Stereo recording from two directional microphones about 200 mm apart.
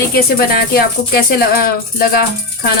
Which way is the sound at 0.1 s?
50° left (ahead or behind).